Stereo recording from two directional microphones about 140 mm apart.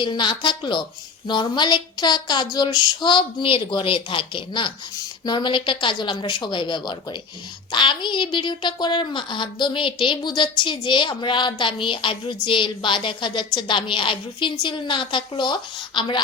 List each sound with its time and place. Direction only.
0.0 s a woman's voice: 35° left (ahead or behind)